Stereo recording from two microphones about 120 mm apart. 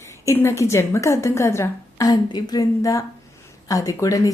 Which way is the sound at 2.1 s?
35° left (ahead or behind).